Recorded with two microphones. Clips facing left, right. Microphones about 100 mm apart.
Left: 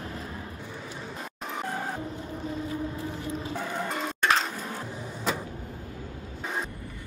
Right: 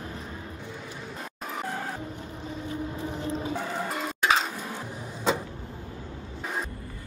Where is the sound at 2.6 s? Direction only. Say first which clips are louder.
Even; 25° right (ahead or behind).